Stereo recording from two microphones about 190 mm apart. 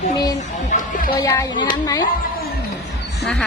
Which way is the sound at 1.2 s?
15° left (ahead or behind).